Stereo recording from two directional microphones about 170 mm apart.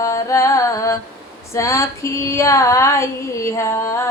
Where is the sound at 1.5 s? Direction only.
15° left (ahead or behind).